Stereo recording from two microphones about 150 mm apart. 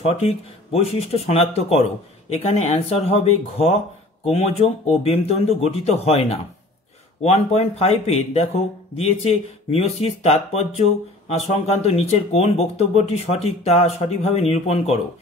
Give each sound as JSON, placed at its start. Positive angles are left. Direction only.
{"t": 0.0, "sound": "speech", "side_deg": 40}